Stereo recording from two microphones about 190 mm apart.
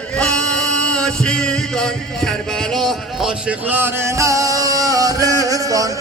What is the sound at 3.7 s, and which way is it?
Music, 10° right (ahead or behind).